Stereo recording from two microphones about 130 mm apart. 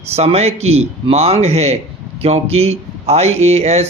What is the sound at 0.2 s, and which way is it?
Speech, 55° right (ahead or behind).